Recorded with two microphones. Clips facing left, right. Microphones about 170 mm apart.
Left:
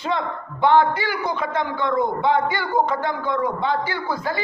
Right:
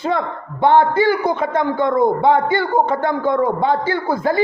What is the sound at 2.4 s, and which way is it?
Speech, 25° right (ahead or behind).